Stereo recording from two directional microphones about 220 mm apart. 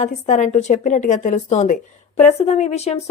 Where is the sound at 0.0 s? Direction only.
35° left (ahead or behind).